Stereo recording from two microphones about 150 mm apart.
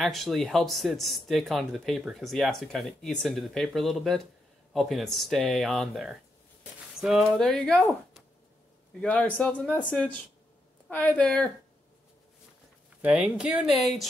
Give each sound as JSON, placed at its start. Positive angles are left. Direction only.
{"t": 0.0, "sound": "a woman's voice", "side_deg": 0}
{"t": 10.9, "sound": "a woman's voice", "side_deg": 10}
{"t": 13.0, "sound": "speech", "side_deg": -5}